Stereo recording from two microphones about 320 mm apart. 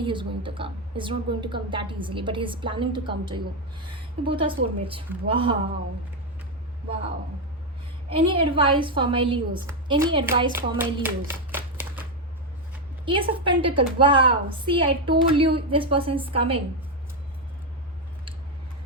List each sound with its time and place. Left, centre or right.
0.0 s a woman's voice: centre
8.1 s a woman's voice: centre
10.8 s a sound: centre
13.1 s a woman's voice: centre